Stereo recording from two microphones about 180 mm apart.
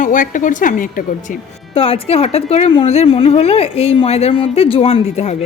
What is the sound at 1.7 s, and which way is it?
A woman's voice, 30° left (ahead or behind).